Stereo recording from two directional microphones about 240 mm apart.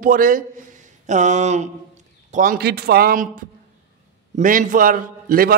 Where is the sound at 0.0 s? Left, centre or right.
Right.